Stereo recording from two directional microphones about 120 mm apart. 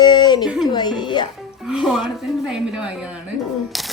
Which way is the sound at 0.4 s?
5° right (ahead or behind).